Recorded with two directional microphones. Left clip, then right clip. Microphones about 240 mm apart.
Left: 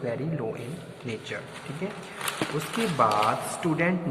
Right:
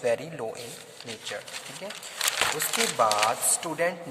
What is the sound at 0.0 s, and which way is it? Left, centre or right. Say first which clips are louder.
Speech: right 4 dB; right.